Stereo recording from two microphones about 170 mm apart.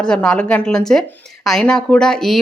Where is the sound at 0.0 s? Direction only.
5° left (ahead or behind).